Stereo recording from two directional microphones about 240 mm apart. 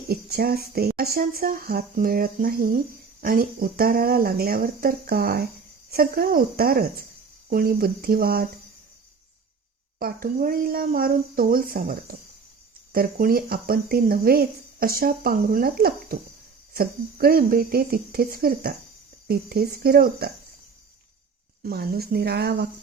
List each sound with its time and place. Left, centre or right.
0.1 s speech: right
10.0 s speech: right
21.6 s speech: right